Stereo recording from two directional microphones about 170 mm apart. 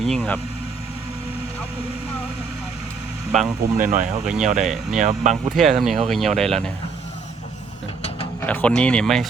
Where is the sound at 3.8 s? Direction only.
50° right (ahead or behind).